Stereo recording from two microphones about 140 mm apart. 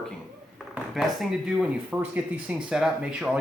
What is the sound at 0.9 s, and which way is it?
Speech, centre (ahead or behind).